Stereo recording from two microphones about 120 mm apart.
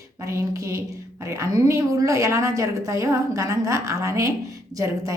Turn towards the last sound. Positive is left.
turn(degrees=-25)  # may be behind; listen again after turning